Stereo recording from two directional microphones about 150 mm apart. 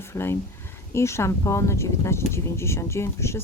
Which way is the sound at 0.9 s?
20° left (ahead or behind).